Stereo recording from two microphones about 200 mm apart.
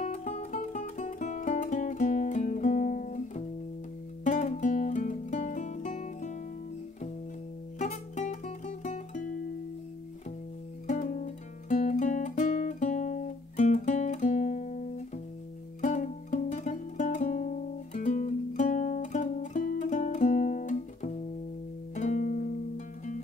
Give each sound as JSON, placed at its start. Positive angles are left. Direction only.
{"t": 0.0, "sound": "music", "side_deg": 35}
{"t": 7.8, "sound": "music", "side_deg": 35}
{"t": 10.9, "sound": "guitar", "side_deg": 40}
{"t": 15.8, "sound": "music", "side_deg": 35}